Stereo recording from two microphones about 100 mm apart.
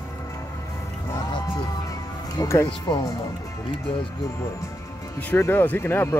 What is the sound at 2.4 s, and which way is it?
Speech, 30° left (ahead or behind).